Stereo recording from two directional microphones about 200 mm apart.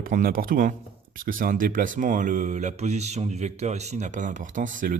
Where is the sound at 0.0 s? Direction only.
45° right (ahead or behind).